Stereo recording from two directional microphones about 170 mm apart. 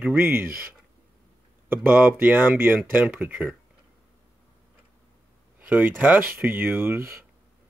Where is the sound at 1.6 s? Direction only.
10° right (ahead or behind).